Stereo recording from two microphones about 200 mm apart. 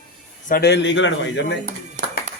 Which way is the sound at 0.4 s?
50° left (ahead or behind).